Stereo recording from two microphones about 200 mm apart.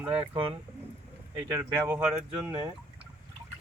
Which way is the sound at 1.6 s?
10° right (ahead or behind).